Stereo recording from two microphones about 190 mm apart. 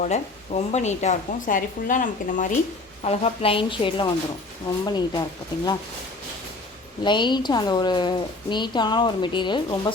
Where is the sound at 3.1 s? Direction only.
30° left (ahead or behind).